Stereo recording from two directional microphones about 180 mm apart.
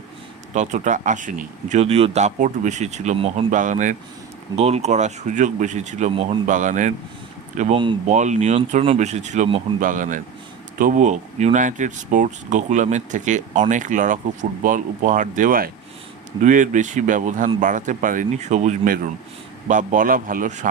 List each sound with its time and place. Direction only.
0.5 s speech: 40° right (ahead or behind)